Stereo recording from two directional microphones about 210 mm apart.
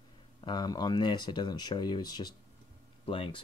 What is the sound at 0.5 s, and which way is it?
Speech, 20° left (ahead or behind).